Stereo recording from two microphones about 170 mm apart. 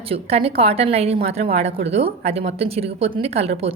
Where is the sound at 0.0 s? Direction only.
35° right (ahead or behind).